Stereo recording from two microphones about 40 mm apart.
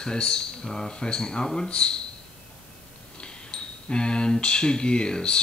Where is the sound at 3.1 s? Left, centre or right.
Left.